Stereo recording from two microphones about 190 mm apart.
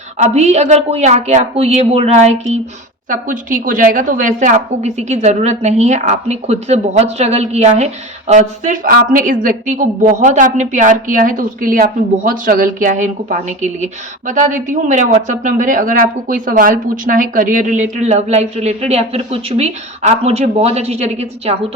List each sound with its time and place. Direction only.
0.2 s a woman's voice: 35° right (ahead or behind)